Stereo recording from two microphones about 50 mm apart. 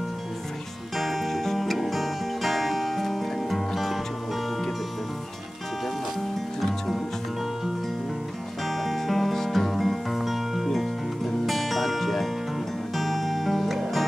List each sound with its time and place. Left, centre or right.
0.9 s music: centre
8.6 s music: centre